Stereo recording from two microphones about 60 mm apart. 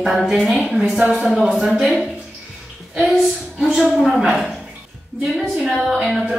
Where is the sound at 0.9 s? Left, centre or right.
Centre.